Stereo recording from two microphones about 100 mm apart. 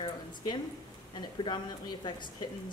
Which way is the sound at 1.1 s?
50° left (ahead or behind).